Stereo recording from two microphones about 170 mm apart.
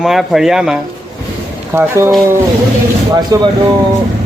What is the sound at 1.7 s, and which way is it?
Speech, 15° right (ahead or behind).